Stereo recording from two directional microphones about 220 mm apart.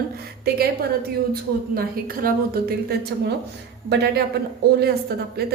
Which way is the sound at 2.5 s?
45° right (ahead or behind).